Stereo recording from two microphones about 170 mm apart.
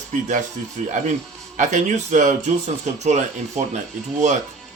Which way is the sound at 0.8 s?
45° right (ahead or behind).